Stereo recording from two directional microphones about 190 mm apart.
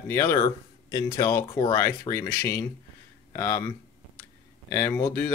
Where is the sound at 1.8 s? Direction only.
15° left (ahead or behind).